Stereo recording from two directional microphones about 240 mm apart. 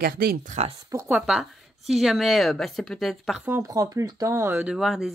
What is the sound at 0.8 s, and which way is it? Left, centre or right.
A woman's voice, centre.